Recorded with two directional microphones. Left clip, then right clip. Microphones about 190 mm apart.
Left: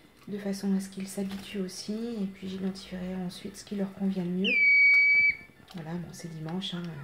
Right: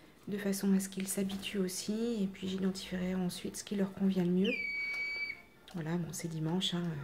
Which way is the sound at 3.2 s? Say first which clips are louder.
Even; 50° right (ahead or behind).